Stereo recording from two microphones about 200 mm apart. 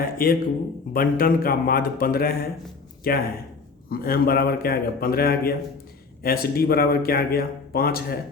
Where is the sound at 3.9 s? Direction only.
50° left (ahead or behind).